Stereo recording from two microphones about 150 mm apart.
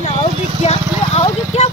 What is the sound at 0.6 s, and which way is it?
Speech, 45° left (ahead or behind).